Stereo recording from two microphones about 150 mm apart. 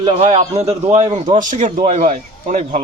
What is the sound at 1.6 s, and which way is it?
Speech, 45° right (ahead or behind).